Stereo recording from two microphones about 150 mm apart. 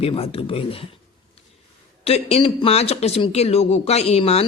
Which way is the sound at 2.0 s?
45° left (ahead or behind).